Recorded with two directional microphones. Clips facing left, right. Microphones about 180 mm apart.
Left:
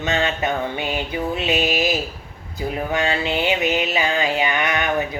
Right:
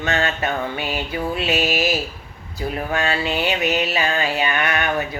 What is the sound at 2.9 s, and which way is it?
Speech, 20° left (ahead or behind).